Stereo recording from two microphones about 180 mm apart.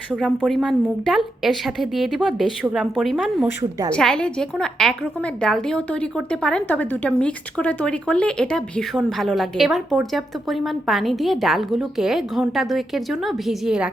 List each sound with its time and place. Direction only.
0.1 s a woman's voice: centre (ahead or behind)
3.4 s a woman's voice: 20° right (ahead or behind)
3.9 s a woman's voice: 5° left (ahead or behind)